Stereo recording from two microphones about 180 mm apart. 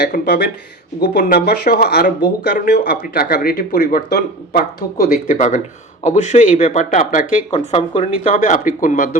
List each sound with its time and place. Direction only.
0.0 s speech: 55° left (ahead or behind)
7.5 s speech: 30° left (ahead or behind)
8.3 s speech: 50° left (ahead or behind)